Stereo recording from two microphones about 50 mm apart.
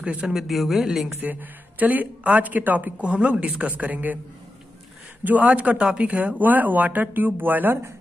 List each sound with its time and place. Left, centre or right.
0.0 s speech: right
0.3 s speech: centre
1.2 s speech: right
3.0 s a woman's voice: right
5.2 s a woman's voice: right